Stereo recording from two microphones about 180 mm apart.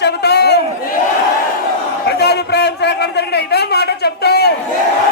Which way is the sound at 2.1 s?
65° left (ahead or behind).